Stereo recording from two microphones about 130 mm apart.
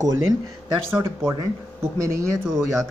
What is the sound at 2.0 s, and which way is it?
Speech, 20° right (ahead or behind).